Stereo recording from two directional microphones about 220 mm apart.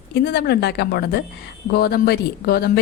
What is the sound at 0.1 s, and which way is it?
A woman's voice, 45° left (ahead or behind).